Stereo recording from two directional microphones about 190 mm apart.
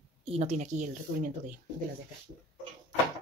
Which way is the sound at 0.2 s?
35° right (ahead or behind).